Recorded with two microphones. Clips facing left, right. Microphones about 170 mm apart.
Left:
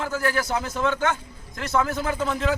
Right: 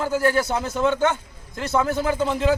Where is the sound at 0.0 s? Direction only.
30° right (ahead or behind).